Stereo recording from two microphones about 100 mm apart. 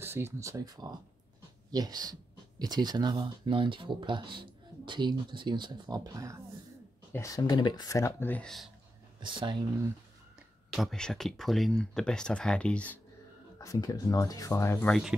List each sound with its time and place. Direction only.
0.0 s speech: 25° right (ahead or behind)
7.2 s speech: 40° left (ahead or behind)
8.0 s speech: 20° left (ahead or behind)
8.4 s speech: 5° left (ahead or behind)
9.2 s speech: 50° right (ahead or behind)
10.7 s speech: centre (ahead or behind)
13.6 s speech: 35° left (ahead or behind)
14.5 s speech: 25° left (ahead or behind)